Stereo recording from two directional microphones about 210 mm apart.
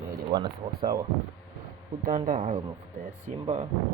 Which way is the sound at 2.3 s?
30° right (ahead or behind).